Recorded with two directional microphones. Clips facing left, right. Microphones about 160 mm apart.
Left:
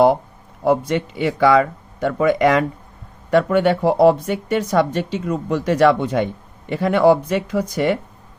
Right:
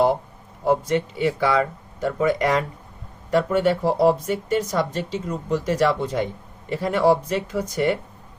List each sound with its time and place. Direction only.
0.6 s a woman's voice: 85° left
3.2 s a woman's voice: 65° left (ahead or behind); by 7.6 s 80° left